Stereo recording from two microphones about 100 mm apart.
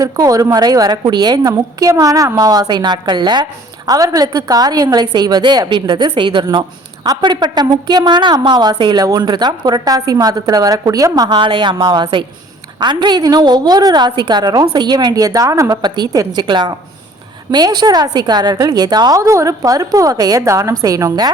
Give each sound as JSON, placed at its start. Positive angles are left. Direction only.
{"t": 0.0, "sound": "a woman's voice", "side_deg": -35}
{"t": 3.8, "sound": "a woman's voice", "side_deg": -35}
{"t": 15.8, "sound": "a woman's voice", "side_deg": -45}
{"t": 19.2, "sound": "a woman's voice", "side_deg": -30}